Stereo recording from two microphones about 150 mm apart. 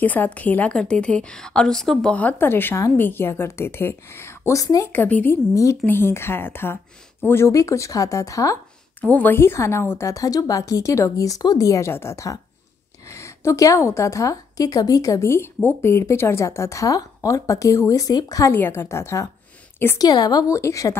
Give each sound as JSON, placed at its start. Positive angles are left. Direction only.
{"t": 0.0, "sound": "a woman's voice", "side_deg": 10}
{"t": 4.9, "sound": "a woman's voice", "side_deg": 10}
{"t": 9.0, "sound": "a woman's voice", "side_deg": 10}
{"t": 20.1, "sound": "a woman's voice", "side_deg": 25}